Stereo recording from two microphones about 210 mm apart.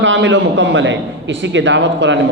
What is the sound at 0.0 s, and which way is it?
A man's voice, 60° right (ahead or behind).